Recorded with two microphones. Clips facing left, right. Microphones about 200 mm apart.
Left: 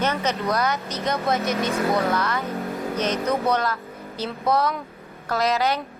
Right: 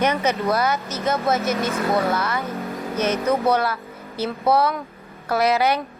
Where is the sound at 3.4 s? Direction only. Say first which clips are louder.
Right 3 dB; 5° right (ahead or behind).